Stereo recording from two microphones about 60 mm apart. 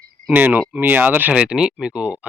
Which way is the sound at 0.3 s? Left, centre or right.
Right.